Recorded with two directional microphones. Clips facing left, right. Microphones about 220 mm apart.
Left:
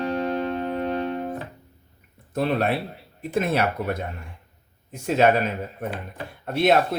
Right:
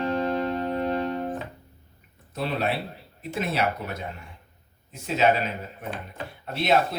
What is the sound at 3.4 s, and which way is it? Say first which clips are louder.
Speech: left 4 dB; 55° left (ahead or behind).